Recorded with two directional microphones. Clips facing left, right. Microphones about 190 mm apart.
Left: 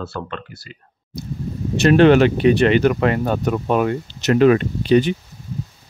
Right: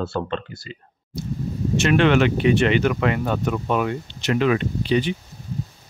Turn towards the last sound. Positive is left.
turn(degrees=45)  # may be behind; listen again after turning